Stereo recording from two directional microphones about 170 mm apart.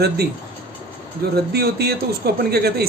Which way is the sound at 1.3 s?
70° right (ahead or behind).